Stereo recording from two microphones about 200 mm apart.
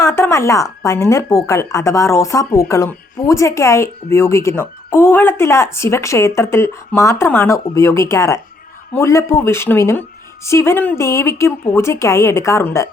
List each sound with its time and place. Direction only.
0.0 s speech: 15° left (ahead or behind)